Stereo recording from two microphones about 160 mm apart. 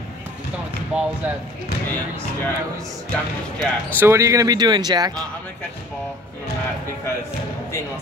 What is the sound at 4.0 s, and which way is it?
Speech, 15° right (ahead or behind).